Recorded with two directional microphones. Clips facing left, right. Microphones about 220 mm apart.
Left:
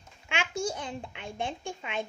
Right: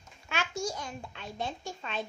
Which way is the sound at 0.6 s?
30° left (ahead or behind).